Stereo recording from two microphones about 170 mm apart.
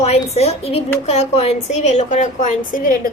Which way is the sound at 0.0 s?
40° left (ahead or behind).